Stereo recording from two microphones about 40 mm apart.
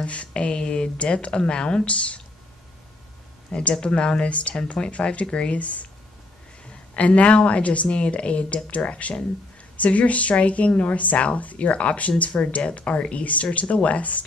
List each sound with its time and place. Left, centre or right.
0.0 s speech: left
3.7 s speech: left
7.0 s speech: left